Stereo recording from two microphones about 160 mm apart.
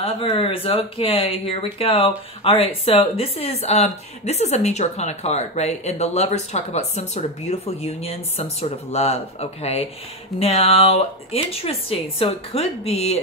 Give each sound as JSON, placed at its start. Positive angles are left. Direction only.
{"t": 0.0, "sound": "speech", "side_deg": 35}